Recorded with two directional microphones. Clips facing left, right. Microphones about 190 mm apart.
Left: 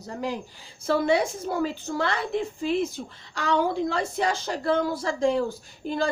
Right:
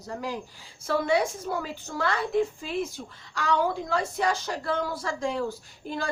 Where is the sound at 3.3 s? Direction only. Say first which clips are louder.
Left 2 dB; 25° left (ahead or behind).